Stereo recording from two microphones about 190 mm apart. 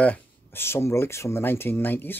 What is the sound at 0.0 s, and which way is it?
Speech, 10° left (ahead or behind).